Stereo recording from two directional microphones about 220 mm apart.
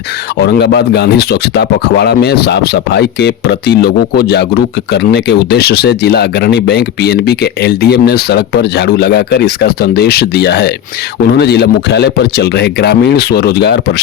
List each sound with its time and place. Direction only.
0.3 s speech: 50° left (ahead or behind)